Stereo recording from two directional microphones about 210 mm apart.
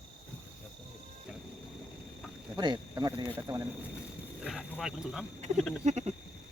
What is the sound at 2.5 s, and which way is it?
Speech, 20° right (ahead or behind).